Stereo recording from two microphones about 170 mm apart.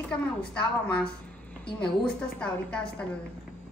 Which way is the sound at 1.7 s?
5° left (ahead or behind).